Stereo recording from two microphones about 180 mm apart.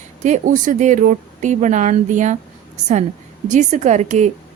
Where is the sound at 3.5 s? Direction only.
40° right (ahead or behind).